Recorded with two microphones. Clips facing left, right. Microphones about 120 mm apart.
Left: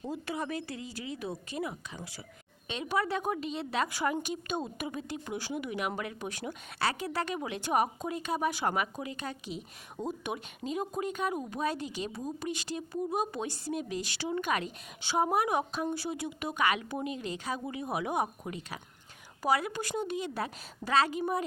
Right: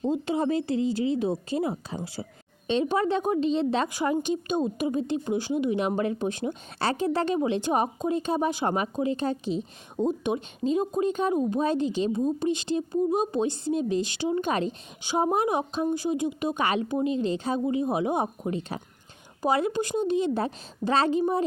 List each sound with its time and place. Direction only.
0.0 s a woman's voice: 25° right (ahead or behind)